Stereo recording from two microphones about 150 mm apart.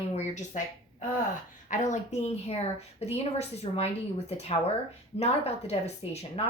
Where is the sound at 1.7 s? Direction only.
55° left (ahead or behind).